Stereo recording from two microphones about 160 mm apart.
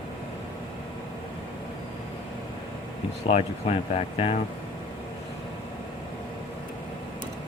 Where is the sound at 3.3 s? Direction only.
40° left (ahead or behind).